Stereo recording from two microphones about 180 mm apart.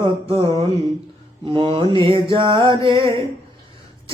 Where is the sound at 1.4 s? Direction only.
30° right (ahead or behind).